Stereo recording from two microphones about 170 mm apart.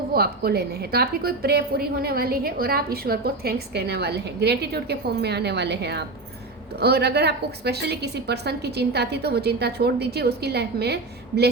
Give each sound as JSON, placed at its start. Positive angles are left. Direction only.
{"t": 0.1, "sound": "a woman's voice", "side_deg": -65}